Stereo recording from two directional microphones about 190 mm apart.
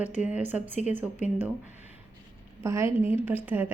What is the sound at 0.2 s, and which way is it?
Speech, 5° right (ahead or behind).